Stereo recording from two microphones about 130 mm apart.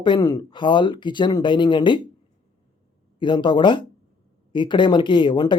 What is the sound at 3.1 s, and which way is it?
Speech, 40° left (ahead or behind).